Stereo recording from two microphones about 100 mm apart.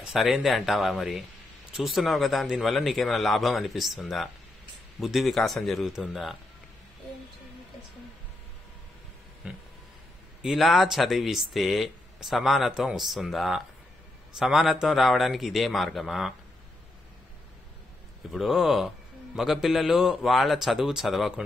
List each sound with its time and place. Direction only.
0.0 s a man's voice: centre (ahead or behind)
9.4 s a sound: 10° right (ahead or behind)
10.4 s a man's voice: centre (ahead or behind)
18.3 s a man's voice: centre (ahead or behind)